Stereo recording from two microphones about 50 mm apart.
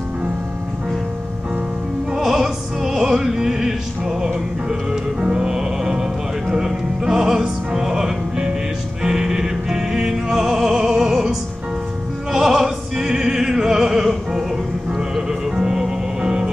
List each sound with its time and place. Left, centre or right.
2.1 s opera: centre
5.2 s music: centre
12.3 s opera: centre
15.1 s music: centre